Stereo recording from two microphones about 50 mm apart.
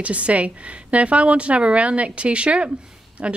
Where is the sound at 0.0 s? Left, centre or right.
Right.